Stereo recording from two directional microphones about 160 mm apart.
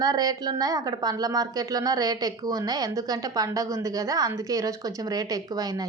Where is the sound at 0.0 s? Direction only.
25° right (ahead or behind).